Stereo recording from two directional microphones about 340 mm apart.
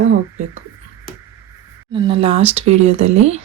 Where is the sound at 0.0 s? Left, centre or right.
Right.